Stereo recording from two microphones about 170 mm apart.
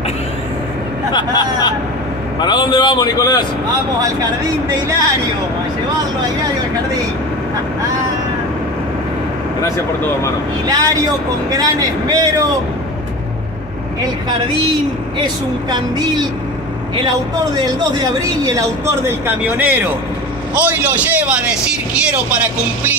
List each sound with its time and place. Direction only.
1.1 s vehicle: 25° left (ahead or behind)
2.4 s a sound: 30° left (ahead or behind)
4.6 s a man's voice: 20° right (ahead or behind)
10.7 s a man's voice: 20° right (ahead or behind)
17.6 s speech: 20° right (ahead or behind)